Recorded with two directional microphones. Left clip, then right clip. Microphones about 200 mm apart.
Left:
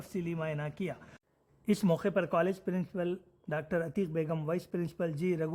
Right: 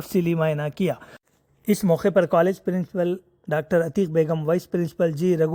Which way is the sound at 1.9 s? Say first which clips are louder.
Right 14 dB; 35° right (ahead or behind).